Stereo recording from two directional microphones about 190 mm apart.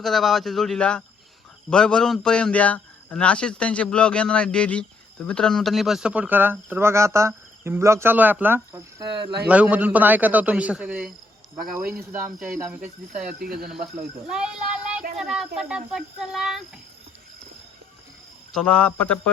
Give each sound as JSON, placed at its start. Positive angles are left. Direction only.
{"t": 0.0, "sound": "a man's voice", "side_deg": 0}
{"t": 12.8, "sound": "speech", "side_deg": -45}
{"t": 14.3, "sound": "child singing", "side_deg": -5}
{"t": 15.2, "sound": "a man's voice", "side_deg": 0}
{"t": 18.5, "sound": "speech", "side_deg": 5}